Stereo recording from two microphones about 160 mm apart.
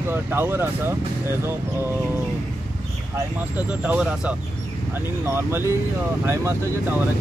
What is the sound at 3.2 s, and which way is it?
Speech, 10° right (ahead or behind).